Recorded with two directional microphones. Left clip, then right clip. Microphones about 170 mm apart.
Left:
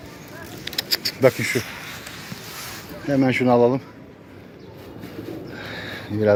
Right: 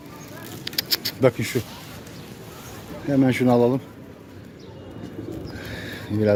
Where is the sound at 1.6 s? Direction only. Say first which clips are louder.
Left 2 dB; 15° right (ahead or behind).